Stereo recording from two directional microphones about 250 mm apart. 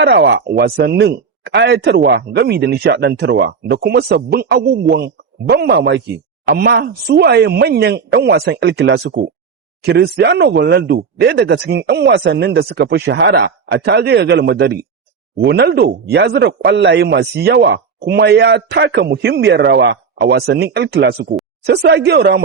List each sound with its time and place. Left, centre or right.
0.0 s speech: right